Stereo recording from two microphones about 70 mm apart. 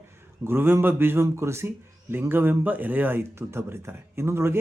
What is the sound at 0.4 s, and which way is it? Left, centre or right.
Speech, right.